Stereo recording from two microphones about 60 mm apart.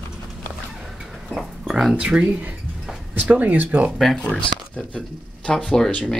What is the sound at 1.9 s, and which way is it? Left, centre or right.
Speech, centre.